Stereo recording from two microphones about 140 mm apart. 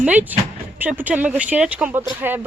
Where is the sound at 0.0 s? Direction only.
10° right (ahead or behind).